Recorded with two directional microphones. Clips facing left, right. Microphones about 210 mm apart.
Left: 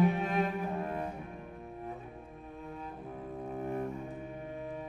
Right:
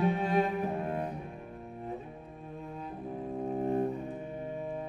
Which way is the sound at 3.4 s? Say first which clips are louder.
Right 6 dB; 25° right (ahead or behind).